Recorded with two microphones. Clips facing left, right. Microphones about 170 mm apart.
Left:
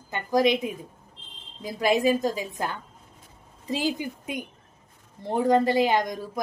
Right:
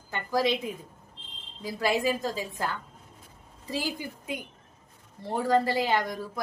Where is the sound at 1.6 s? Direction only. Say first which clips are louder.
Left 4 dB; 20° left (ahead or behind).